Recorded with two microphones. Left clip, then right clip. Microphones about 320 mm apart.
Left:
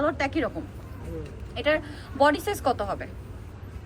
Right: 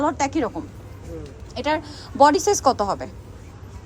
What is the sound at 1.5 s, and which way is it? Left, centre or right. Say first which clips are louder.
A woman's voice: right 1 dB; centre.